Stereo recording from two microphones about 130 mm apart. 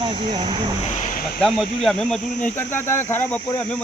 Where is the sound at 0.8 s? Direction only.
70° left (ahead or behind); by 1.3 s 85° left.